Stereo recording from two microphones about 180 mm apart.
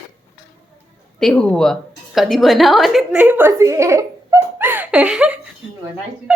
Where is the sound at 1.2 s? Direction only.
5° left (ahead or behind).